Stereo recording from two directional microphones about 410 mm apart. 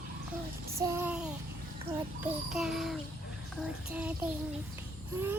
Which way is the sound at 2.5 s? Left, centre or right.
Centre.